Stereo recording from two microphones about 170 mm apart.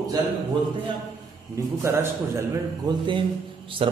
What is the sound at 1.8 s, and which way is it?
A man's voice, 15° right (ahead or behind).